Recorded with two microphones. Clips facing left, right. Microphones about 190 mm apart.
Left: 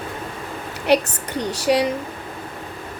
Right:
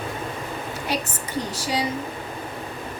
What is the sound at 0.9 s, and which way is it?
Speech, 70° left (ahead or behind).